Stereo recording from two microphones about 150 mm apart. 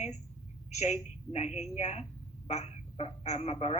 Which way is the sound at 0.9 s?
50° left (ahead or behind).